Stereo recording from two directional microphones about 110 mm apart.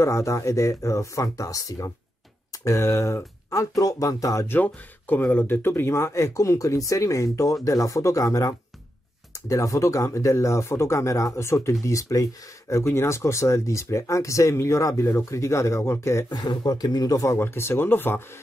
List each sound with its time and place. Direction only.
0.0 s speech: 25° left (ahead or behind)
4.5 s speech: 15° left (ahead or behind)
16.3 s speech: 40° left (ahead or behind); by 18.2 s 20° left (ahead or behind)